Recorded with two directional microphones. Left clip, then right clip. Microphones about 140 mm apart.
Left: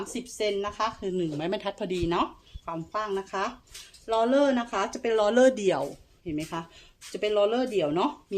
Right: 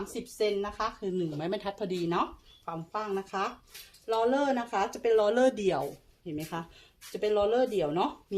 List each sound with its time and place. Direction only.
0.1 s a woman's voice: 35° left (ahead or behind)